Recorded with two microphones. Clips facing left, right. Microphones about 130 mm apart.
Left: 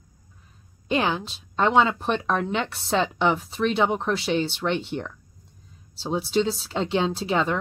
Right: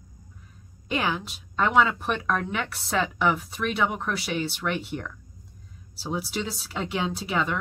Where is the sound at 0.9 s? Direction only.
25° left (ahead or behind).